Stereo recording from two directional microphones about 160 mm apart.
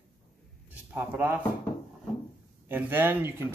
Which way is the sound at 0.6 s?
10° right (ahead or behind).